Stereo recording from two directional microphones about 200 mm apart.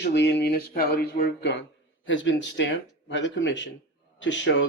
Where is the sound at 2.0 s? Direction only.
70° left (ahead or behind).